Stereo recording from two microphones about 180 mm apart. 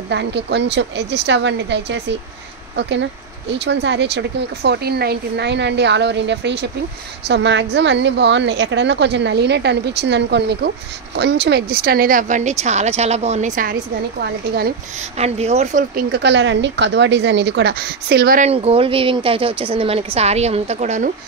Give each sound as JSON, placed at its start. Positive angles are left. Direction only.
{"t": 0.1, "sound": "a woman's voice", "side_deg": -70}
{"t": 3.5, "sound": "a woman's voice", "side_deg": -70}
{"t": 14.2, "sound": "speech", "side_deg": -65}
{"t": 15.1, "sound": "speech", "side_deg": -35}
{"t": 15.9, "sound": "a woman's voice", "side_deg": -60}
{"t": 18.4, "sound": "speech", "side_deg": -35}